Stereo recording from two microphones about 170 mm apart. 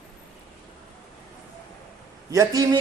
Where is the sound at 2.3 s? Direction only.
20° right (ahead or behind).